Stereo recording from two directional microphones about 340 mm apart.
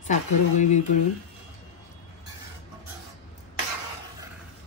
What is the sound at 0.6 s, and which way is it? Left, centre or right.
Speech, left.